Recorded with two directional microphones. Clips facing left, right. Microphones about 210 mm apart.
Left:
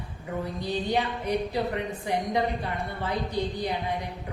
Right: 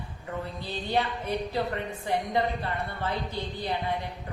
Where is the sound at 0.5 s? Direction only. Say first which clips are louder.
Left 2 dB; 15° left (ahead or behind).